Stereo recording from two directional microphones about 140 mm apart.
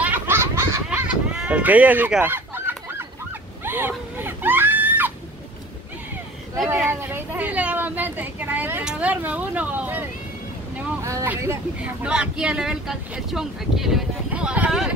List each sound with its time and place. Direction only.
0.0 s a sound: 15° right (ahead or behind)
0.8 s fowl: 5° right (ahead or behind)
3.6 s baby cry: 15° right (ahead or behind)
6.7 s speech: 15° right (ahead or behind)
11.8 s speech: 5° right (ahead or behind)